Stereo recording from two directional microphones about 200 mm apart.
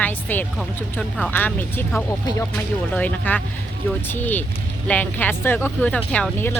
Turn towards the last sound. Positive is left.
turn(degrees=10)  # may be behind; listen again after turning